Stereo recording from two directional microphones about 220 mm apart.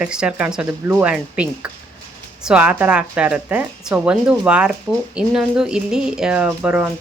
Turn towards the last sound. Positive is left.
turn(degrees=-10)  # may be behind; listen again after turning